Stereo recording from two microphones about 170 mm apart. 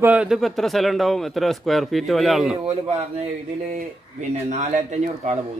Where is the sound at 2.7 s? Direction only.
40° right (ahead or behind).